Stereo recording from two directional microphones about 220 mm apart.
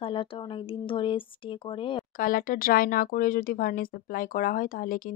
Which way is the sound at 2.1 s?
40° left (ahead or behind).